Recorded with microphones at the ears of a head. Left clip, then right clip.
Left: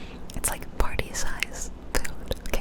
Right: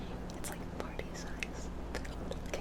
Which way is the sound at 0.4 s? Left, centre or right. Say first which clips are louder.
Left 14 dB; left.